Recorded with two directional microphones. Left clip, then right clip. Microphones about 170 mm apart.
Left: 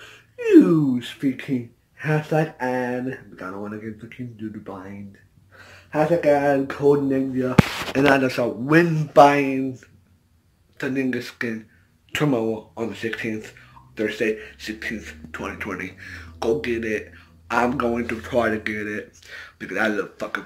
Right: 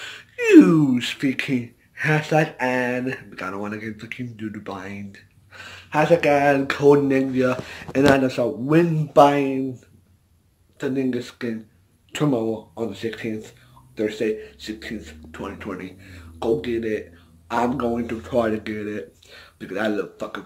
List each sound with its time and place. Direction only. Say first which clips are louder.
0.0 s gasp: right 3 dB; 10° right (ahead or behind)
0.6 s speech: right 2 dB; 30° right (ahead or behind)
0.9 s speech: right 3 dB; 15° right (ahead or behind)
2.0 s speech: right 3 dB; 5° right (ahead or behind)
10.8 s speech: even; 5° right (ahead or behind)